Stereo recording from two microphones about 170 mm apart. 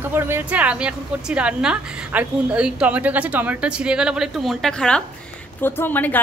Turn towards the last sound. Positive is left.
turn(degrees=10)  # may be behind; listen again after turning